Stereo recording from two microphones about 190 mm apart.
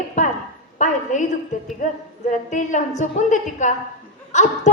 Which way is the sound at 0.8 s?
40° left (ahead or behind).